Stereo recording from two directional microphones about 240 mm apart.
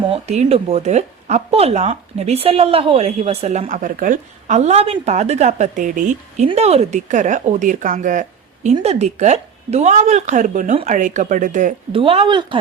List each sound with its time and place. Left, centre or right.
0.1 s speech: right